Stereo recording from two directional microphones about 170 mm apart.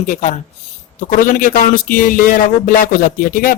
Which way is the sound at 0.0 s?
50° left (ahead or behind).